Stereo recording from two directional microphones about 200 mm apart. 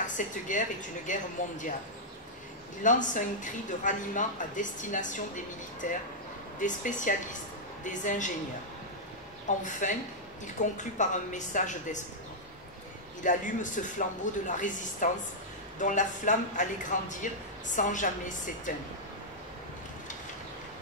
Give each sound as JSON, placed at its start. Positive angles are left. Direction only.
{"t": 0.0, "sound": "a woman's voice", "side_deg": 40}
{"t": 2.8, "sound": "a woman's voice", "side_deg": 40}
{"t": 9.6, "sound": "a woman's voice", "side_deg": 40}
{"t": 13.2, "sound": "a woman's voice", "side_deg": 40}